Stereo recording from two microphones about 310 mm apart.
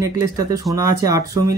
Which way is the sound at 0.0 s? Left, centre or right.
Centre.